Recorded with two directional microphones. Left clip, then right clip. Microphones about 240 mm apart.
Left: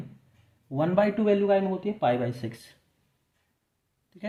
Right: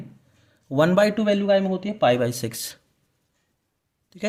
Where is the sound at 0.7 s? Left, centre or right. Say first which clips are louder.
Right 6 dB; right.